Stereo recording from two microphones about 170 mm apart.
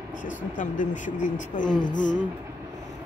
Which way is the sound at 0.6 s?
50° left (ahead or behind).